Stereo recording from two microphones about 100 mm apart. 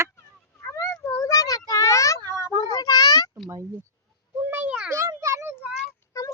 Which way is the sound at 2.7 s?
40° left (ahead or behind).